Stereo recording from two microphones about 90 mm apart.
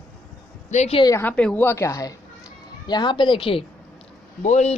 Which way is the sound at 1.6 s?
30° left (ahead or behind).